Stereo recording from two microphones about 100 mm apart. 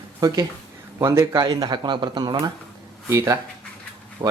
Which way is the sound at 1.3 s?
50° right (ahead or behind).